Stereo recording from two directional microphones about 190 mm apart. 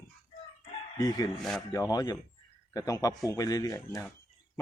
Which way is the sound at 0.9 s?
20° left (ahead or behind).